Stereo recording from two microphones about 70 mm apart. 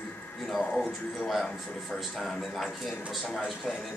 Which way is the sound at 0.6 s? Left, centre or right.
Centre.